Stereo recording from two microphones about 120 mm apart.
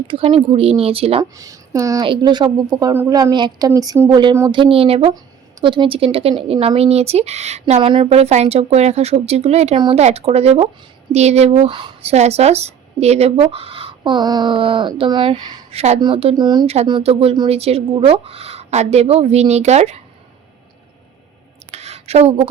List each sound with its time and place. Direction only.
0.1 s a woman's voice: 55° right (ahead or behind)
1.2 s speech: 30° right (ahead or behind)
2.0 s speech: 40° right (ahead or behind)
3.8 s speech: 25° right (ahead or behind)
4.1 s speech: 40° right (ahead or behind)
5.6 s a woman's voice: 45° right (ahead or behind); by 7.6 s 65° right (ahead or behind)
7.8 s speech: 45° right (ahead or behind)
8.1 s a woman's voice: 65° right (ahead or behind); by 15.6 s 40° right (ahead or behind)
15.7 s a woman's voice: 60° right (ahead or behind)
16.0 s speech: 50° right (ahead or behind)
16.4 s speech: 35° right (ahead or behind)
17.0 s a woman's voice: 55° right (ahead or behind)
21.7 s a sound: 65° right (ahead or behind)